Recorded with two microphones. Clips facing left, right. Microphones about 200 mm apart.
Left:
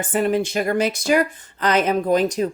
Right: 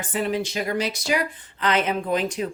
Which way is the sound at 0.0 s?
50° left (ahead or behind).